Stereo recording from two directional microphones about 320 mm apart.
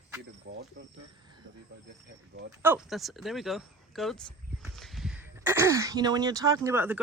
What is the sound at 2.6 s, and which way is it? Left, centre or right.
Speech, centre.